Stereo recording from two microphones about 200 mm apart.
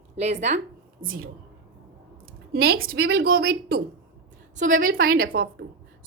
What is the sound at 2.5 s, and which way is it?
A woman's voice, 50° right (ahead or behind).